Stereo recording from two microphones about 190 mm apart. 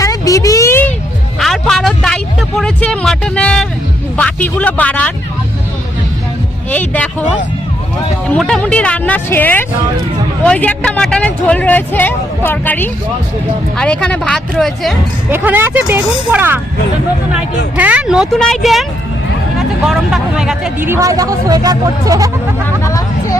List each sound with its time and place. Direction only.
0.0 s a sound: 15° left (ahead or behind)
1.4 s a sound: centre (ahead or behind)
4.2 s speech: 10° left (ahead or behind)
6.7 s speech: 10° left (ahead or behind)
8.3 s speech: 5° left (ahead or behind)
15.3 s speech: 10° right (ahead or behind)
17.7 s speech: 5° right (ahead or behind)
22.8 s speech: 15° left (ahead or behind)